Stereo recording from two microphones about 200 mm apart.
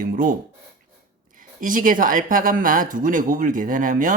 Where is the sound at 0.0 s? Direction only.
40° right (ahead or behind).